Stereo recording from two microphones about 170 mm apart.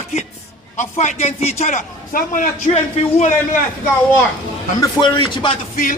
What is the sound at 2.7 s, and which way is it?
Speech, 40° left (ahead or behind).